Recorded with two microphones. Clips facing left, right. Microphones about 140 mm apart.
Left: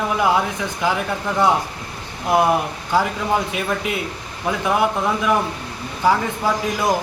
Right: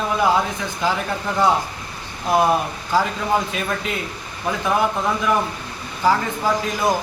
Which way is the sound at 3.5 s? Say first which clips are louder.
Left 2 dB; 15° left (ahead or behind).